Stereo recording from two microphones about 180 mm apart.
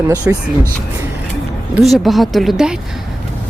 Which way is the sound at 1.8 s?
Centre (ahead or behind).